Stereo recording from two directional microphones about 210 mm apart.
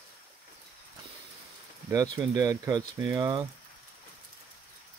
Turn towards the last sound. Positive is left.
turn(degrees=-20)  # may be behind; listen again after turning